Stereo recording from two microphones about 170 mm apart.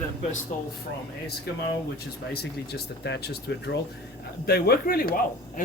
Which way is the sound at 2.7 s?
80° left.